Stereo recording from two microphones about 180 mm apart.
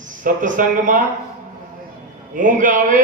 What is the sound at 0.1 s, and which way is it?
Speech, 45° right (ahead or behind).